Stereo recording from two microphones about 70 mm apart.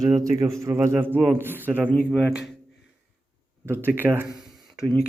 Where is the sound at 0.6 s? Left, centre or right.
Right.